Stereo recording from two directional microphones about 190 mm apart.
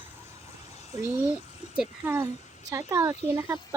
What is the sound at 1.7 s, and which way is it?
Speech, 10° right (ahead or behind).